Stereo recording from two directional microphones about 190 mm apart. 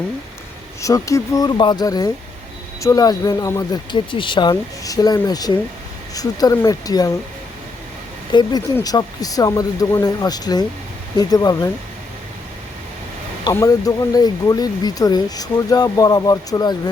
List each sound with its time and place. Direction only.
0.8 s speech: 15° left (ahead or behind)
8.3 s speech: 25° left (ahead or behind)
13.4 s speech: 15° left (ahead or behind)